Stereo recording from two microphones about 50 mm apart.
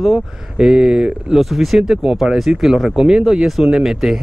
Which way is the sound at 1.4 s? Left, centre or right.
Centre.